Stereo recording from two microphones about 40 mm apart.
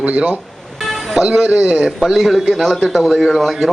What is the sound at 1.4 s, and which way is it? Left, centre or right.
Speech, right.